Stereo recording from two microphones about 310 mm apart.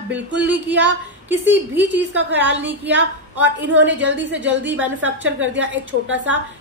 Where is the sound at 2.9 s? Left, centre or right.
Right.